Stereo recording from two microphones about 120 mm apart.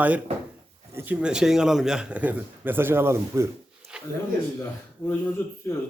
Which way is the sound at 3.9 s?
10° right (ahead or behind).